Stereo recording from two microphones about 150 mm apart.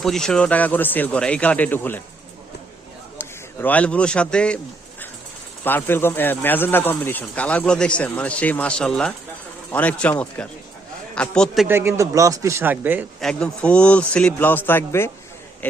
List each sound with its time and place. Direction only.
0.0 s speech: 5° left (ahead or behind)
3.2 s speech: 10° left (ahead or behind)
5.6 s a man's voice: 15° left (ahead or behind)
11.7 s speech: 15° right (ahead or behind)
13.1 s speech: 5° left (ahead or behind)